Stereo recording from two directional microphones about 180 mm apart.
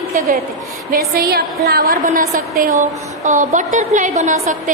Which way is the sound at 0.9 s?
55° right (ahead or behind).